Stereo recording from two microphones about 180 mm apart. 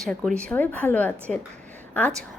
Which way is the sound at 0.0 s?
5° left (ahead or behind).